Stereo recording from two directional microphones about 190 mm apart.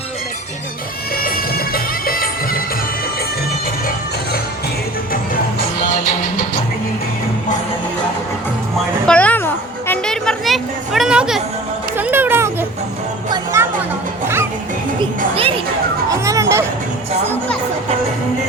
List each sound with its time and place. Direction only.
1.1 s music: 50° left (ahead or behind)
5.1 s music: 50° left (ahead or behind)
9.0 s a sound: 5° left (ahead or behind); by 12.5 s 10° right (ahead or behind)
13.3 s music: 15° right (ahead or behind)
15.4 s music: 30° right (ahead or behind)
16.0 s a sound: 15° right (ahead or behind)